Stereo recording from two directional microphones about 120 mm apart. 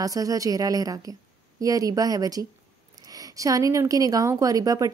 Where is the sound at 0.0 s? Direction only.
30° right (ahead or behind).